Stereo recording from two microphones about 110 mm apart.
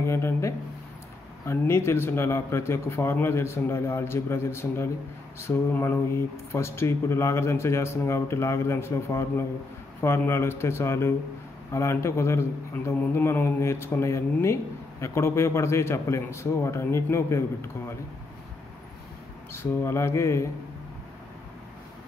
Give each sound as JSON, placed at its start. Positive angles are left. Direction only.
{"t": 0.0, "sound": "a man's voice", "side_deg": 25}
{"t": 19.5, "sound": "a man's voice", "side_deg": 20}